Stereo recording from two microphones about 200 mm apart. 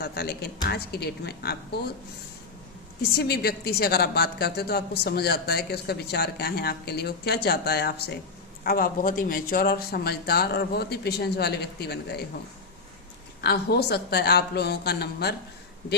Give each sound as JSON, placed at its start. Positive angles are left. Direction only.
{"t": 0.0, "sound": "a woman's voice", "side_deg": 55}
{"t": 3.0, "sound": "a woman's voice", "side_deg": 50}
{"t": 13.4, "sound": "a woman's voice", "side_deg": 55}